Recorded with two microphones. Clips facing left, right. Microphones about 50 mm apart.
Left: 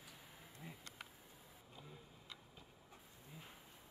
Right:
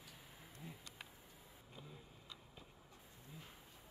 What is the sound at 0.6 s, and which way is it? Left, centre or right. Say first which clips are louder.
Insect: even; left.